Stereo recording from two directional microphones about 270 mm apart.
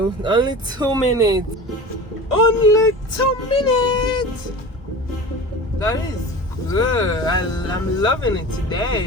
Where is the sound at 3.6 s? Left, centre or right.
Centre.